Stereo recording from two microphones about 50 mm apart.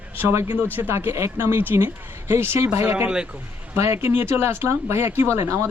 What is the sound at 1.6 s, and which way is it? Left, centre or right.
Speech, right.